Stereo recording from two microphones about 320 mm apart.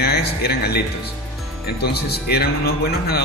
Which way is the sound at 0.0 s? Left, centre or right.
Left.